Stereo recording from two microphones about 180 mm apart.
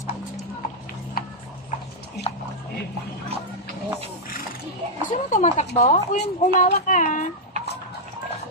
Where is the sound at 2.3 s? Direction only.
35° left (ahead or behind).